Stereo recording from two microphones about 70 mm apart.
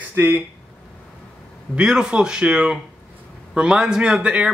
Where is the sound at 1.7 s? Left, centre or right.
Centre.